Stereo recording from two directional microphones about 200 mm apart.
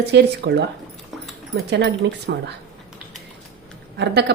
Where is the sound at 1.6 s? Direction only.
60° right (ahead or behind).